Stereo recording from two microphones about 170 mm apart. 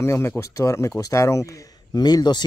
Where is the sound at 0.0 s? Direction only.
15° left (ahead or behind).